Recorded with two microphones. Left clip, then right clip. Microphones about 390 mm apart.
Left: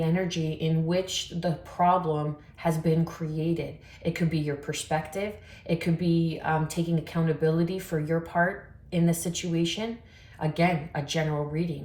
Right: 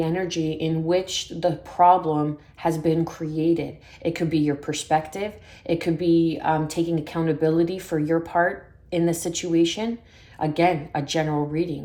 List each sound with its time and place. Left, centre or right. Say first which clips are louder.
0.0 s speech: right 5 dB; centre